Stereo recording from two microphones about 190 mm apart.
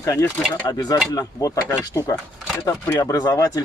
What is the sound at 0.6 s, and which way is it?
Speech, 20° left (ahead or behind).